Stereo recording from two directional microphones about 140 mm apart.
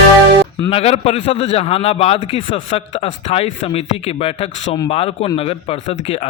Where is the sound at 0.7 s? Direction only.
45° left (ahead or behind).